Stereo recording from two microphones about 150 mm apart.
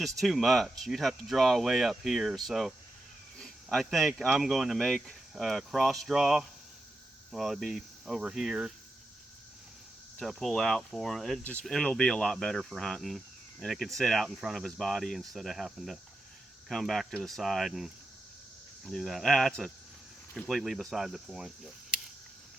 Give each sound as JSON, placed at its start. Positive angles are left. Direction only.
{"t": 0.0, "sound": "speech", "side_deg": 0}
{"t": 10.2, "sound": "speech", "side_deg": 0}